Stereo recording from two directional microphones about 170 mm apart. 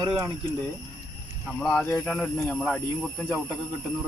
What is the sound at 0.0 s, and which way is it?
Speech, 25° right (ahead or behind).